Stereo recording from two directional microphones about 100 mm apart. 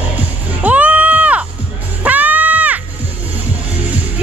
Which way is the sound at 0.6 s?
15° right (ahead or behind).